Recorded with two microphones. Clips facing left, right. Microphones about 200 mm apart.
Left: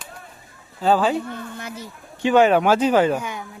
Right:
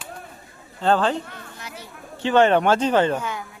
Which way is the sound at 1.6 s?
55° left (ahead or behind).